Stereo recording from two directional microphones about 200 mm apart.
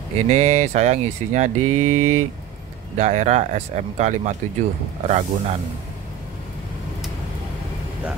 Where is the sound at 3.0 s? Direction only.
35° right (ahead or behind).